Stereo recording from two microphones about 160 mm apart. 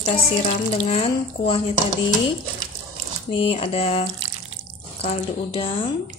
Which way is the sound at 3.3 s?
35° left (ahead or behind).